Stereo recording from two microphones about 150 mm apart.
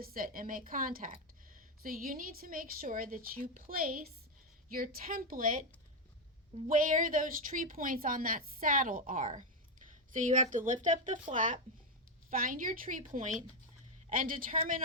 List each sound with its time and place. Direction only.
0.0 s speech: 70° right (ahead or behind)
6.7 s a woman's voice: 65° right (ahead or behind)